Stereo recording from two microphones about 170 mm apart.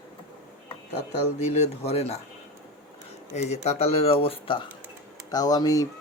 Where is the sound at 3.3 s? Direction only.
40° left (ahead or behind); by 5.9 s 20° left (ahead or behind).